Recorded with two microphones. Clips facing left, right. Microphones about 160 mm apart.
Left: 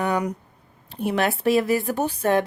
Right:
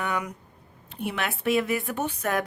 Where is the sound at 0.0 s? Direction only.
35° left (ahead or behind).